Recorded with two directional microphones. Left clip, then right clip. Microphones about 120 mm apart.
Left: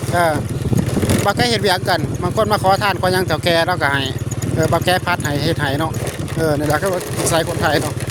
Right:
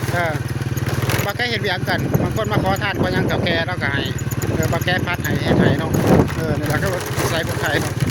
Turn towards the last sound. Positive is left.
turn(degrees=60)  # may be behind; listen again after turning